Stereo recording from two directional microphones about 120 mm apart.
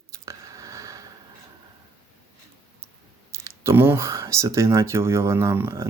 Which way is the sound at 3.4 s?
20° right (ahead or behind).